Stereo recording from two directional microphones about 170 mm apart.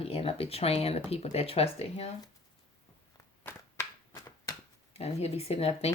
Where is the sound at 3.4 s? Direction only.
15° left (ahead or behind).